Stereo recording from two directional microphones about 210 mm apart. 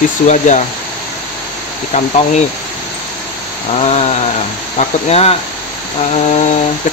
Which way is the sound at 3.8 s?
30° left (ahead or behind).